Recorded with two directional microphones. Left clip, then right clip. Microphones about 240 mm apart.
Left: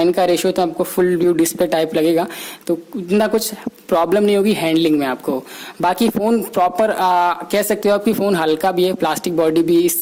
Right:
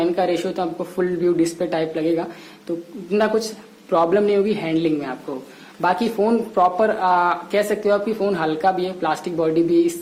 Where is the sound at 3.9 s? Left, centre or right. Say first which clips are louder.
Left 2 dB; left.